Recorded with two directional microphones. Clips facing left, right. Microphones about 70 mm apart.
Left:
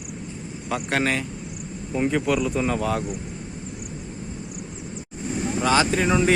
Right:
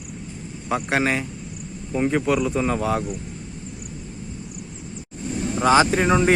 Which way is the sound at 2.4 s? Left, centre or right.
Centre.